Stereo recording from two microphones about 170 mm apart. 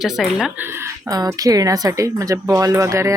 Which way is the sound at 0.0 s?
Centre (ahead or behind).